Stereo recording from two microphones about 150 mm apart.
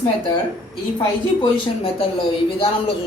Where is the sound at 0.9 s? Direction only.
35° left (ahead or behind).